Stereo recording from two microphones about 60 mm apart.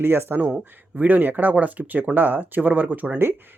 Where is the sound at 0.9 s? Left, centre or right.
Right.